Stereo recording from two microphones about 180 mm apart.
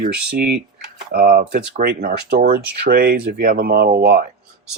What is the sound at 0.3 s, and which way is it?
Speech, 60° right (ahead or behind).